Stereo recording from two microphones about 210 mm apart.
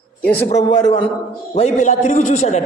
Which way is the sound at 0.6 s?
20° left (ahead or behind).